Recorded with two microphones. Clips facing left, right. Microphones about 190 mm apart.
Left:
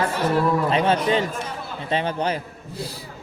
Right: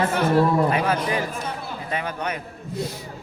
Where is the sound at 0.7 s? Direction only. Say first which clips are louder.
Left 3 dB; 25° left (ahead or behind).